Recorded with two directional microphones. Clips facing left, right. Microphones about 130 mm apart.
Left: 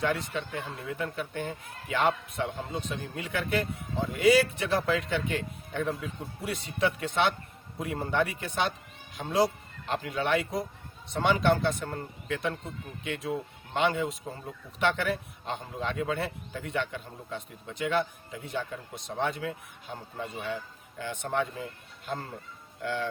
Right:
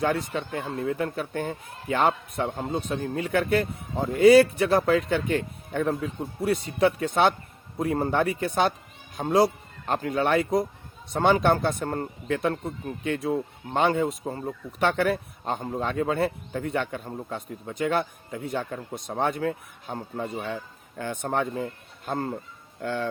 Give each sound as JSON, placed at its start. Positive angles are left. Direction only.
{"t": 0.0, "sound": "speech", "side_deg": -40}
{"t": 2.7, "sound": "speech", "side_deg": -40}